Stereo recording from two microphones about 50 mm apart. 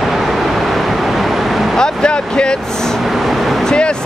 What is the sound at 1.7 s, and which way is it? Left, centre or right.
Speech, centre.